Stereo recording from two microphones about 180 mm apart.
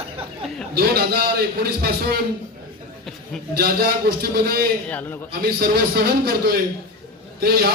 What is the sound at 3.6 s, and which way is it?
A man's voice, 55° right (ahead or behind).